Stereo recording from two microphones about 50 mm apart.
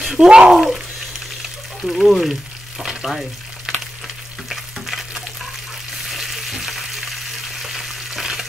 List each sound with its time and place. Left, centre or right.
0.0 s bathtub: centre
0.3 s speech: centre
0.6 s speech: centre
2.8 s frying: centre
4.5 s stir: centre
6.0 s frying: centre